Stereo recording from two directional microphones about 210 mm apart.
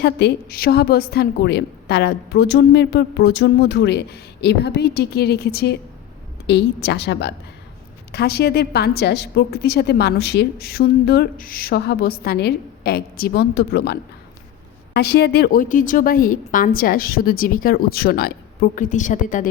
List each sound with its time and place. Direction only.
0.0 s a woman's voice: 55° left (ahead or behind); by 19.5 s 40° left (ahead or behind)